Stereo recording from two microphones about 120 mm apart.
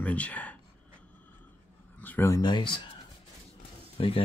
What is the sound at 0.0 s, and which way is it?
Speech, 10° left (ahead or behind).